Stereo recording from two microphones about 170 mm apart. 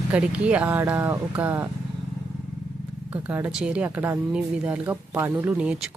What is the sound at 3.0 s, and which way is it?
Speech, 10° right (ahead or behind).